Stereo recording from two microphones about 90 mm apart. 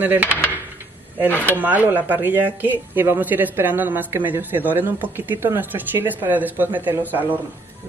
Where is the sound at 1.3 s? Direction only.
20° left (ahead or behind).